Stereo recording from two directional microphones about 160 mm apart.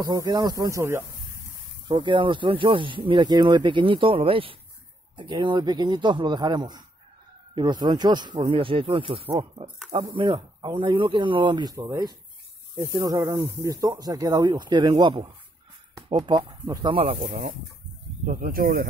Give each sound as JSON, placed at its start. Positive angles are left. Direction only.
{"t": 0.0, "sound": "speech", "side_deg": -25}
{"t": 1.9, "sound": "speech", "side_deg": -30}
{"t": 17.3, "sound": "speech", "side_deg": -55}